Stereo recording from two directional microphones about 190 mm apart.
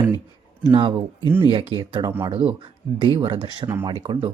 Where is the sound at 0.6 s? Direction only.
25° right (ahead or behind).